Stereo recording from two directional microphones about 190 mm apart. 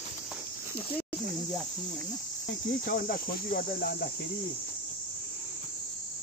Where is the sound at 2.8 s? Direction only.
50° left (ahead or behind).